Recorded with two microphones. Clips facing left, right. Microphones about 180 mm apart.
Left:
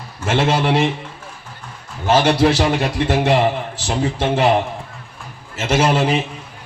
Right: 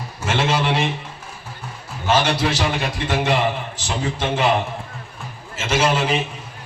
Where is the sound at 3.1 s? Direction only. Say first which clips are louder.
Left 4 dB; 35° left (ahead or behind).